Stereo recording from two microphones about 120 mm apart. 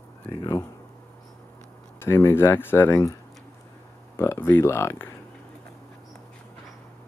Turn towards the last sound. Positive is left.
turn(degrees=20)  # may be behind; listen again after turning